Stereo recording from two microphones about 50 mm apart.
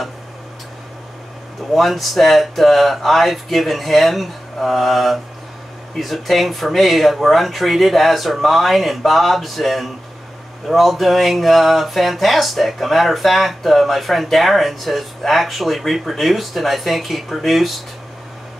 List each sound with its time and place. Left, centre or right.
1.7 s speech: centre